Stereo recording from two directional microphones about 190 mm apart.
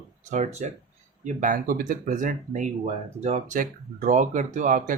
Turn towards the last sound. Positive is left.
turn(degrees=-45)  # may be behind; listen again after turning